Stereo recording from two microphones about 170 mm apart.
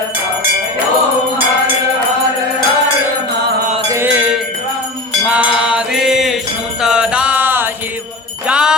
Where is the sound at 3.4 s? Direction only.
75° right (ahead or behind).